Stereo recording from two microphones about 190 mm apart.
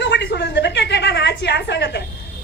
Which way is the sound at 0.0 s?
65° left (ahead or behind).